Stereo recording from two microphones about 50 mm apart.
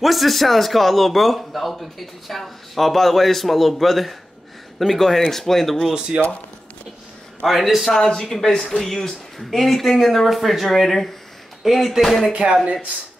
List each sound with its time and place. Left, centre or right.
0.0 s a man's voice: centre
5.9 s speech: centre
7.4 s a man's voice: centre
7.9 s a man's voice: centre
12.3 s speech: centre